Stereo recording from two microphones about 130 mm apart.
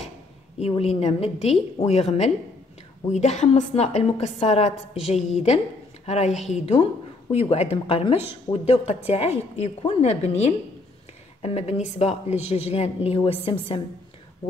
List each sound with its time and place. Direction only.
0.6 s a woman's voice: 50° left (ahead or behind)